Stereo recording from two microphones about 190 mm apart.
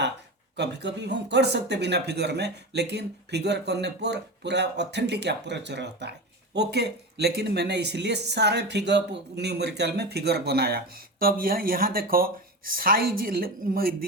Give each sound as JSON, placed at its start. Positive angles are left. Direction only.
{"t": 0.5, "sound": "speech", "side_deg": -65}